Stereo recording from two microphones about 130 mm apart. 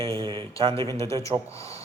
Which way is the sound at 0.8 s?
25° left (ahead or behind).